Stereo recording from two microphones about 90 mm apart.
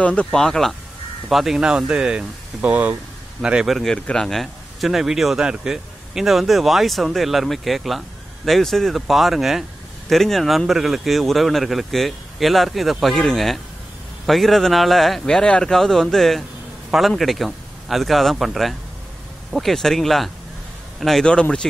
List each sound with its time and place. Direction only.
0.0 s speech: 10° left (ahead or behind)